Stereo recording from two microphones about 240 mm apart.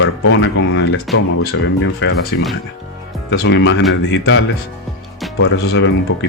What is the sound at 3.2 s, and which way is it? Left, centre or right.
Speech, left.